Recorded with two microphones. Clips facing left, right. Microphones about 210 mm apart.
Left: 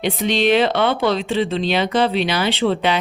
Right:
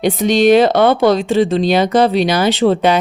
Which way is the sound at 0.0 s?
45° right (ahead or behind).